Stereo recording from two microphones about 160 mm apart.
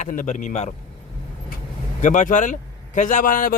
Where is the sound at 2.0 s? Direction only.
50° left (ahead or behind).